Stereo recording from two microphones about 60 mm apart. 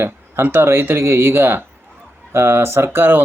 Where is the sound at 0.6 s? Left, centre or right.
Right.